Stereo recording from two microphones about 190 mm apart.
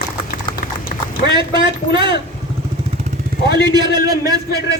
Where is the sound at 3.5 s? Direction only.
20° right (ahead or behind).